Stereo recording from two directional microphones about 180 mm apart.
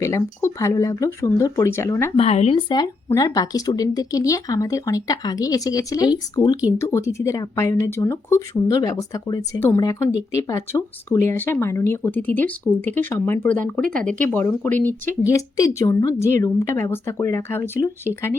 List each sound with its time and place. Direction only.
0.0 s speech: 15° left (ahead or behind)
2.1 s speech: 35° left (ahead or behind); by 18.3 s 15° left (ahead or behind)